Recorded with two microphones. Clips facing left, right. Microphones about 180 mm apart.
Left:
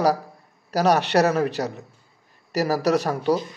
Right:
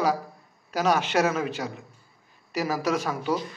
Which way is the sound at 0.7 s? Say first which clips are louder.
Left 4 dB; 40° left (ahead or behind).